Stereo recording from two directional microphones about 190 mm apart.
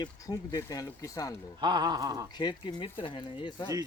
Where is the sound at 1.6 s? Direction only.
25° right (ahead or behind).